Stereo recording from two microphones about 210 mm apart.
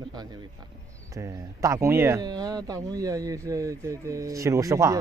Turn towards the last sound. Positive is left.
turn(degrees=-15)  # may be behind; listen again after turning